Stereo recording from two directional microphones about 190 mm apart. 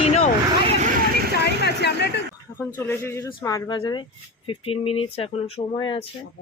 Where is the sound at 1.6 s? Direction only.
60° left (ahead or behind).